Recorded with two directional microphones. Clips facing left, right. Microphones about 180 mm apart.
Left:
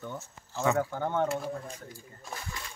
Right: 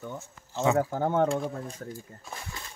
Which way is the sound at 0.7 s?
40° right (ahead or behind).